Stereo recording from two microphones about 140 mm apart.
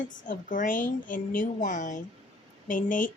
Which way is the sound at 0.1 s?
70° left (ahead or behind).